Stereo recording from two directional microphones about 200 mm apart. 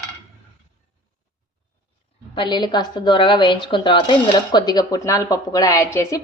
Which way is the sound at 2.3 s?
25° left (ahead or behind).